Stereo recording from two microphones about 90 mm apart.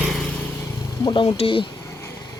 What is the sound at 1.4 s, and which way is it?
Speech, 75° left (ahead or behind).